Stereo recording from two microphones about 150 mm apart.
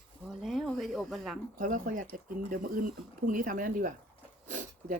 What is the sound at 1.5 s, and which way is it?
Speech, 60° right (ahead or behind).